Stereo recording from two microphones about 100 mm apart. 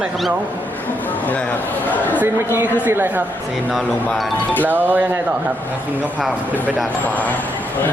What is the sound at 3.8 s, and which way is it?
Speech, centre (ahead or behind).